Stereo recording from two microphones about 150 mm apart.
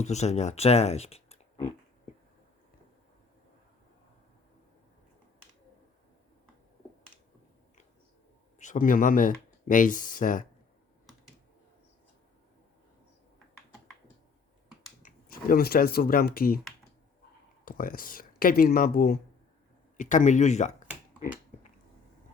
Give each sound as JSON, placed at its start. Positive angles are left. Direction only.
{"t": 0.0, "sound": "speech", "side_deg": 50}
{"t": 8.5, "sound": "speech", "side_deg": 55}
{"t": 15.0, "sound": "speech", "side_deg": 70}
{"t": 17.7, "sound": "speech", "side_deg": 70}
{"t": 20.0, "sound": "speech", "side_deg": 55}